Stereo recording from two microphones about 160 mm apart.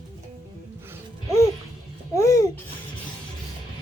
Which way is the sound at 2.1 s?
20° left (ahead or behind).